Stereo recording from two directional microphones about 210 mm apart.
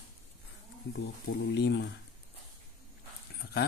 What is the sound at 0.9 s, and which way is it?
Speech, 55° left (ahead or behind).